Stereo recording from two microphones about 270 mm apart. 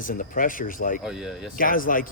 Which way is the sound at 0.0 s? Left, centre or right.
Left.